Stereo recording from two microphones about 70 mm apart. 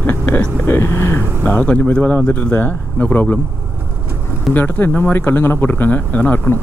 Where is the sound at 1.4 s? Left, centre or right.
Centre.